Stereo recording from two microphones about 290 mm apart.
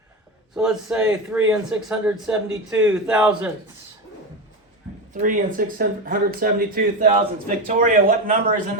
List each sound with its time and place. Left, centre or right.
0.5 s speech: centre
5.1 s speech: right